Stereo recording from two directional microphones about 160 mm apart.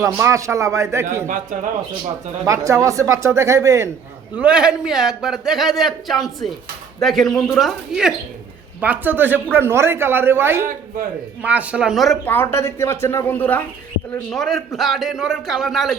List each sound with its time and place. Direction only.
0.0 s a man's voice: 15° right (ahead or behind)
2.4 s speech: 20° right (ahead or behind)
4.4 s a man's voice: 5° right (ahead or behind)
12.2 s a man's voice: 10° left (ahead or behind)